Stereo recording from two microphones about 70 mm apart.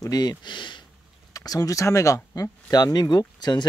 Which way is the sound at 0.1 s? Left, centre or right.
Left.